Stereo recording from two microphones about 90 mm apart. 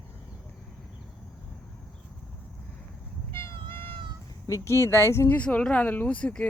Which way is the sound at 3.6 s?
70° right (ahead or behind).